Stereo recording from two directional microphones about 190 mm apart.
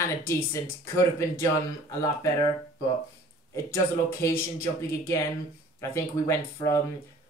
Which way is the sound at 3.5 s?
15° left (ahead or behind).